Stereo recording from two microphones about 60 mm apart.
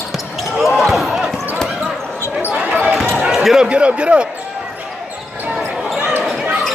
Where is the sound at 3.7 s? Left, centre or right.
Centre.